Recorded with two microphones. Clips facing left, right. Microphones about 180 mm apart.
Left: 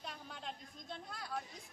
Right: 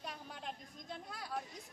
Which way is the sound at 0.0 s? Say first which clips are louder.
Right 1 dB; 10° right (ahead or behind).